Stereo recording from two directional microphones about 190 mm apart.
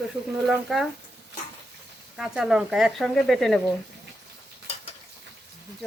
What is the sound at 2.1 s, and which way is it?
Speech, centre (ahead or behind).